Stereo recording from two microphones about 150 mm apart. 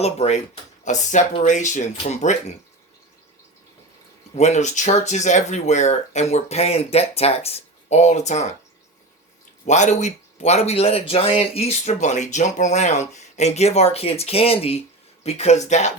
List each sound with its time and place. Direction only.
0.0 s speech: 45° left (ahead or behind)
4.4 s speech: 50° left (ahead or behind)
9.6 s speech: 55° left (ahead or behind)